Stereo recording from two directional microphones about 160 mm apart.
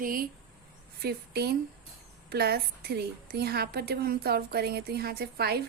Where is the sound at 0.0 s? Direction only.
60° right (ahead or behind).